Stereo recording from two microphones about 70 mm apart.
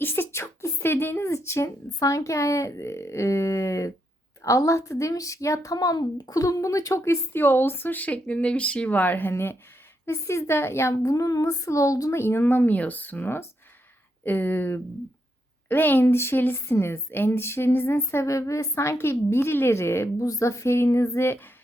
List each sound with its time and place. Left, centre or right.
0.0 s a sound: left
2.0 s a woman's voice: left
11.0 s speech: left
12.1 s a woman's voice: left
20.1 s speech: left